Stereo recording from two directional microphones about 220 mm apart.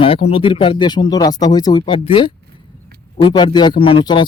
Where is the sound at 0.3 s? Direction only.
25° left (ahead or behind).